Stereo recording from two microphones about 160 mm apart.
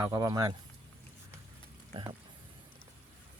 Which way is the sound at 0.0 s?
20° right (ahead or behind).